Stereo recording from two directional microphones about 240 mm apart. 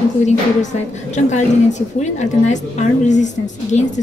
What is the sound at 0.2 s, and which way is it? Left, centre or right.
A woman's voice, left.